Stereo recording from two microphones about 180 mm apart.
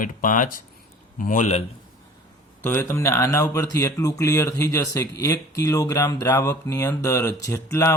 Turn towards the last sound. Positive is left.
turn(degrees=15)  # may be behind; listen again after turning